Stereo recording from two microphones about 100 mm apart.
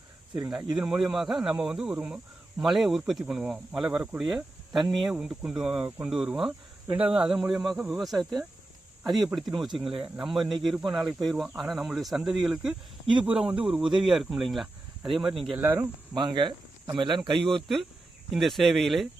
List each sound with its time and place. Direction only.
0.5 s speech: 5° right (ahead or behind)
15.5 s speech: 25° right (ahead or behind)
16.1 s speech: 50° right (ahead or behind)
18.3 s speech: centre (ahead or behind)